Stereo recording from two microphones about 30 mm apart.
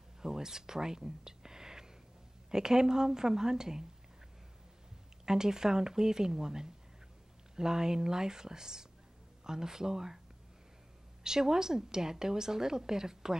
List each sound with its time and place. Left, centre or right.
0.2 s a woman's voice: centre
5.2 s a woman's voice: right
11.2 s a woman's voice: right